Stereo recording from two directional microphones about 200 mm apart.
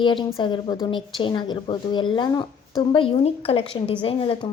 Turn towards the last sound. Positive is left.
turn(degrees=25)  # may be behind; listen again after turning